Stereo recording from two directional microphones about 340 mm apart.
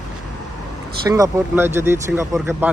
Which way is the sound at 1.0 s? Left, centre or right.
Centre.